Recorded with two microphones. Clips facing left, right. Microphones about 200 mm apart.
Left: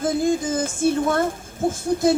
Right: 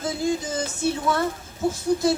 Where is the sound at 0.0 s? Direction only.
50° left (ahead or behind).